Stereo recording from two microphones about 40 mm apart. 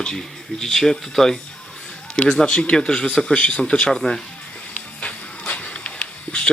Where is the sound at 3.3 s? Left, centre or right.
Left.